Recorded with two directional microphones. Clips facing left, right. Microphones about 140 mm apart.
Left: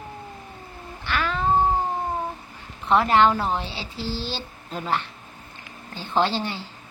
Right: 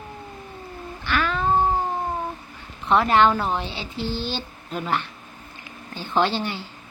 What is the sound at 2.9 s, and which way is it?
Speech, 30° left (ahead or behind).